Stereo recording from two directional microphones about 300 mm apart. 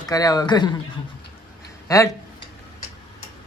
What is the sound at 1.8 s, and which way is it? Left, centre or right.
Speech, centre.